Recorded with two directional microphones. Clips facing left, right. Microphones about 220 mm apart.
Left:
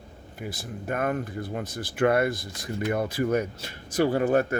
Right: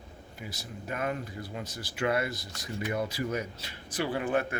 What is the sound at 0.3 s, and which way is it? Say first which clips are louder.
A man's voice: left 7 dB; 55° left (ahead or behind).